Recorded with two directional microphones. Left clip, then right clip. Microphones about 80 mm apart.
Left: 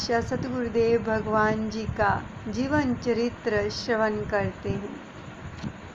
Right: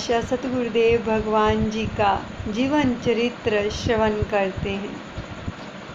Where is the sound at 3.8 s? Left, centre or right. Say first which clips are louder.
Right 4 dB; left.